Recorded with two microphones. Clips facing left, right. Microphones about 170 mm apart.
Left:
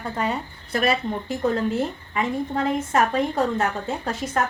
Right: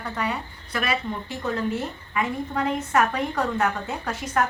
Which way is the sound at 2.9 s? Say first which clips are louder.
Left 1 dB; 25° left (ahead or behind).